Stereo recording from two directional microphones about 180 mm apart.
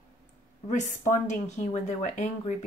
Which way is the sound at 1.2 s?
40° left (ahead or behind).